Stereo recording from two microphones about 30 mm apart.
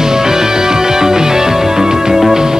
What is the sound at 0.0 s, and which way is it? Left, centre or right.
Music, centre.